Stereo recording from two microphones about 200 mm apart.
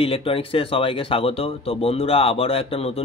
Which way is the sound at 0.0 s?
25° left (ahead or behind).